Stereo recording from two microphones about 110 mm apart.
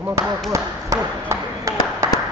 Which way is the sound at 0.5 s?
30° right (ahead or behind).